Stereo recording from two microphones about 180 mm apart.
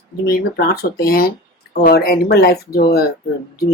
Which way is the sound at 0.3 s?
60° left (ahead or behind).